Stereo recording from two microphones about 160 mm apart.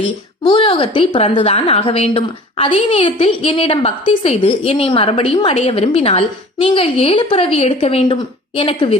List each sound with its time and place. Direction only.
0.0 s a woman's voice: 30° left (ahead or behind)